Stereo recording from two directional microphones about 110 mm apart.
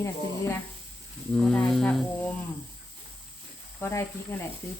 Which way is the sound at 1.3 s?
10° left (ahead or behind).